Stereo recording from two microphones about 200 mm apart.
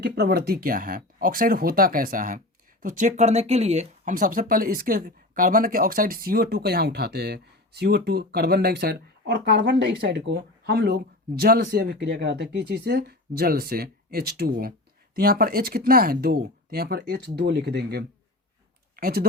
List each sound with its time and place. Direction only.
0.0 s speech: 55° right (ahead or behind)